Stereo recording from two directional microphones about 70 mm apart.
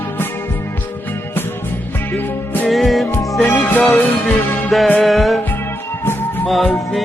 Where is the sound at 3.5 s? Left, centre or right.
Left.